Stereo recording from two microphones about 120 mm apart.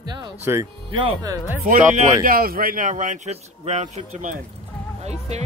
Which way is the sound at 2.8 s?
90° right.